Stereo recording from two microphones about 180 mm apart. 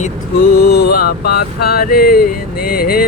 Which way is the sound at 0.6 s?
60° left (ahead or behind).